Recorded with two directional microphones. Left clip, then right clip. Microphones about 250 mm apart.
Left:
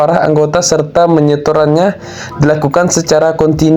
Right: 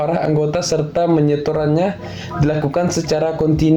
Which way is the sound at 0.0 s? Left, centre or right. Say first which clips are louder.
Left 8 dB; centre.